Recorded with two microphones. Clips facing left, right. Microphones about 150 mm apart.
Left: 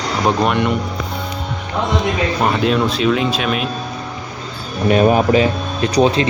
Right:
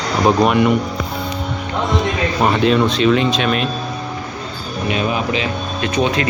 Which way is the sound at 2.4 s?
Centre (ahead or behind).